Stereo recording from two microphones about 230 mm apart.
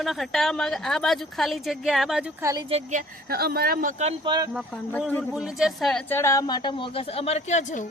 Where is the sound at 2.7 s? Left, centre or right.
Right.